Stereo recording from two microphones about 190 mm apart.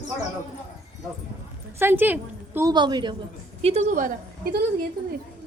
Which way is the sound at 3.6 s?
35° right (ahead or behind).